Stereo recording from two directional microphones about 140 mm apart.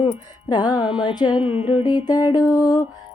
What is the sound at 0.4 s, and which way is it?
Music, 30° left (ahead or behind).